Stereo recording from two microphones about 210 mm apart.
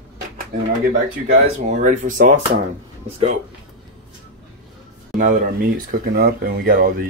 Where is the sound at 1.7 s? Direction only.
35° right (ahead or behind).